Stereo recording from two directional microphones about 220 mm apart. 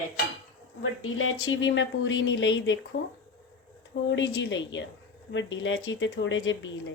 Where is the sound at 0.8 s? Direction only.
65° left (ahead or behind).